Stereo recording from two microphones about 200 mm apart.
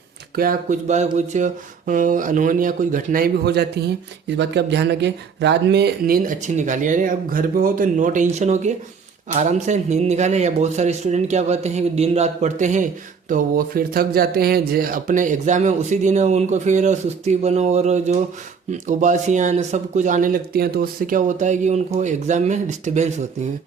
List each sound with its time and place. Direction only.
0.3 s a man's voice: 40° right (ahead or behind)